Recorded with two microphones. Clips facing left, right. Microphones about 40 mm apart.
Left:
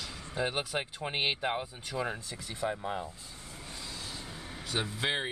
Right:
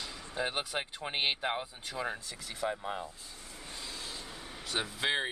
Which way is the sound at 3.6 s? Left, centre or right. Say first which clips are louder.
Even; centre.